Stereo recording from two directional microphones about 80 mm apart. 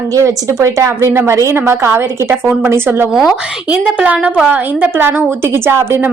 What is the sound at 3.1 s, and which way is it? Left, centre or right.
Speech, centre.